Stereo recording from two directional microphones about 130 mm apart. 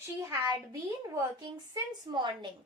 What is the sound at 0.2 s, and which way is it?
A woman's voice, 25° right (ahead or behind).